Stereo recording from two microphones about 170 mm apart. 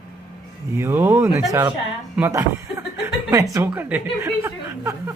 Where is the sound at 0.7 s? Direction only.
15° right (ahead or behind).